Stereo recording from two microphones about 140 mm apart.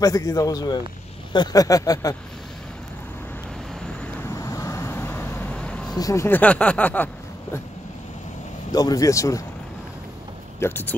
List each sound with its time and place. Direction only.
0.0 s speech: 25° left (ahead or behind)
4.2 s vehicle: 20° left (ahead or behind); by 5.9 s 5° left (ahead or behind)
5.9 s speech: 20° left (ahead or behind)
8.7 s speech: 25° left (ahead or behind)
10.6 s speech: 15° left (ahead or behind)